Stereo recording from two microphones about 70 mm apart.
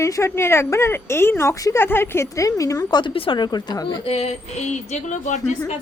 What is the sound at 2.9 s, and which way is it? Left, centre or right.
A woman's voice, left.